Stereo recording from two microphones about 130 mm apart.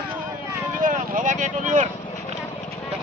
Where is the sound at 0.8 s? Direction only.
90° right; by 1.9 s 75° right (ahead or behind).